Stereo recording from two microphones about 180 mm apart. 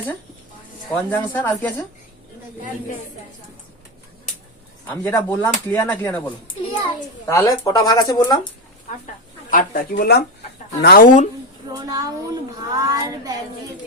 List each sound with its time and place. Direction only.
0.9 s speech: 15° left (ahead or behind)
4.9 s speech: 15° left (ahead or behind)
7.3 s speech: 20° left (ahead or behind)
9.5 s speech: 50° left (ahead or behind)
11.7 s speech: 20° right (ahead or behind)